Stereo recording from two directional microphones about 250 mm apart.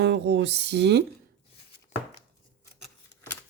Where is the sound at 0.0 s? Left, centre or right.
Right.